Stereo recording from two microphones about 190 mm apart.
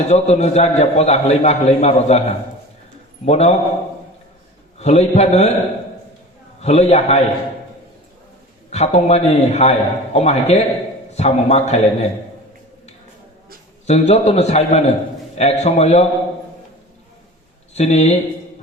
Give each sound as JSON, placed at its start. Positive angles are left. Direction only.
{"t": 0.1, "sound": "a man's voice", "side_deg": 35}
{"t": 4.8, "sound": "a man's voice", "side_deg": 35}
{"t": 6.6, "sound": "a man's voice", "side_deg": 35}
{"t": 8.7, "sound": "a man's voice", "side_deg": 35}
{"t": 13.8, "sound": "a man's voice", "side_deg": 35}
{"t": 17.7, "sound": "a man's voice", "side_deg": 35}